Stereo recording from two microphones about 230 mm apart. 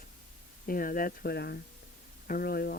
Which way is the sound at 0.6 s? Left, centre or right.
Left.